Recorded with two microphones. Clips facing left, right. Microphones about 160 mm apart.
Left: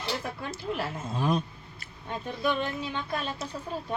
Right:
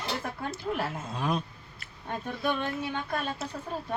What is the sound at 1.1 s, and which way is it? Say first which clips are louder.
Speech: left 3 dB; centre (ahead or behind).